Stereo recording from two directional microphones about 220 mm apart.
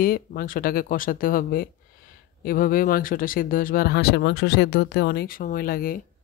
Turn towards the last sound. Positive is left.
turn(degrees=40)  # may be behind; listen again after turning